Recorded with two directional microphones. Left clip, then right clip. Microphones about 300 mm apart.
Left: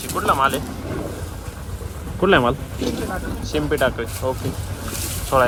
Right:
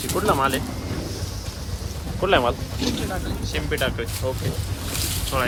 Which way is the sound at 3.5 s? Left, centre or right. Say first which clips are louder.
Left 6 dB; centre.